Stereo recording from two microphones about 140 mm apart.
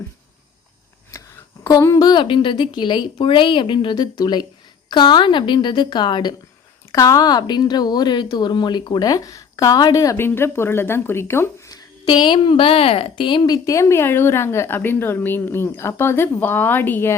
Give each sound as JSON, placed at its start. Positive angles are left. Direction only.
{"t": 1.6, "sound": "speech", "side_deg": 25}
{"t": 12.0, "sound": "a woman's voice", "side_deg": 35}